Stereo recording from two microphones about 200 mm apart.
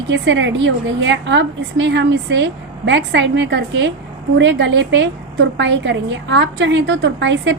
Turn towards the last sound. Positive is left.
turn(degrees=-65)  # may be behind; listen again after turning